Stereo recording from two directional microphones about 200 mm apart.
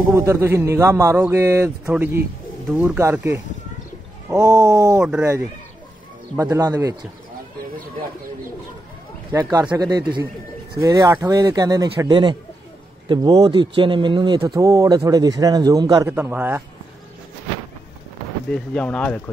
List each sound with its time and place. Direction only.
0.1 s a man's voice: 15° right (ahead or behind)
9.3 s a man's voice: 20° right (ahead or behind)
18.5 s speech: 5° left (ahead or behind)